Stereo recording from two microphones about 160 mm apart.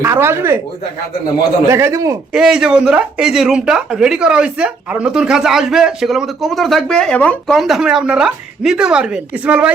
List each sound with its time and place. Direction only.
0.0 s speech: 15° right (ahead or behind)
1.6 s speech: 15° right (ahead or behind)
2.3 s speech: 5° right (ahead or behind)